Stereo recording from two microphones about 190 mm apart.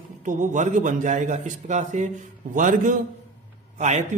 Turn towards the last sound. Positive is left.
turn(degrees=-40)  # may be behind; listen again after turning